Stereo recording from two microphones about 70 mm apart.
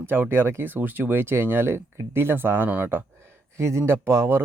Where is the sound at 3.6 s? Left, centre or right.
Right.